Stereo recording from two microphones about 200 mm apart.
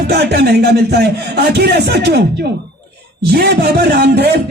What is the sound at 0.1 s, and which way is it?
A man's voice, 55° right (ahead or behind).